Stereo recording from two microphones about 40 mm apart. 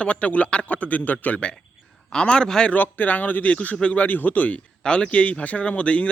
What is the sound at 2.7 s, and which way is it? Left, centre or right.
Speech, left.